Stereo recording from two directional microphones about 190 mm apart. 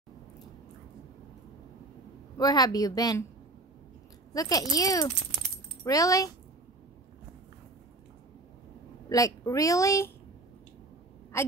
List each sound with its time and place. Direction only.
2.3 s a woman's voice: 20° left (ahead or behind)
4.3 s a woman's voice: 20° left (ahead or behind)
9.1 s a woman's voice: 15° left (ahead or behind)
11.3 s a woman's voice: 15° left (ahead or behind)